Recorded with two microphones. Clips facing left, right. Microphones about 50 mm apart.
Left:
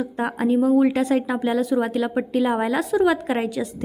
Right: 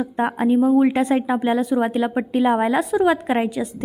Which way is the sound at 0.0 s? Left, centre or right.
Right.